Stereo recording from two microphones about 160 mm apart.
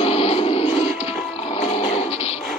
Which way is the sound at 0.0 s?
40° left (ahead or behind).